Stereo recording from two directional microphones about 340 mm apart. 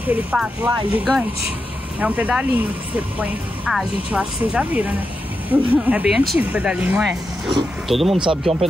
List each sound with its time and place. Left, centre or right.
0.0 s speech: centre
8.2 s speech: centre